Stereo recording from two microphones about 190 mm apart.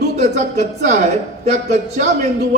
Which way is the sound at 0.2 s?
40° right (ahead or behind).